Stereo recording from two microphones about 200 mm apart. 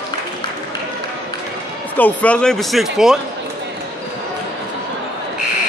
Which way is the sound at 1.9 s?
5° left (ahead or behind).